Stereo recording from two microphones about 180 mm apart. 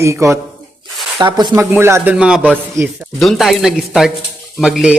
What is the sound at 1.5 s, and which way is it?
Speech, 15° right (ahead or behind).